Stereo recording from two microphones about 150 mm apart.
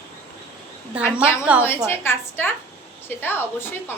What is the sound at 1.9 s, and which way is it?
A woman's voice, 15° left (ahead or behind).